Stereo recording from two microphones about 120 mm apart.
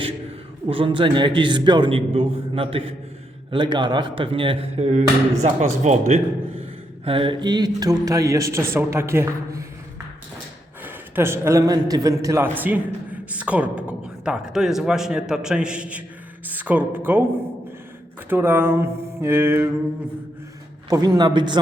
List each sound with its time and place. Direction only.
0.7 s speech: 45° right (ahead or behind)
3.5 s speech: 40° right (ahead or behind); by 6.1 s 70° right (ahead or behind)
6.6 s speech: 50° right (ahead or behind); by 9.6 s 25° right (ahead or behind)
10.8 s a man's voice: 20° right (ahead or behind)
12.5 s a woman's voice: 15° right (ahead or behind)
18.3 s speech: 20° right (ahead or behind)
20.9 s a man's voice: 35° right (ahead or behind)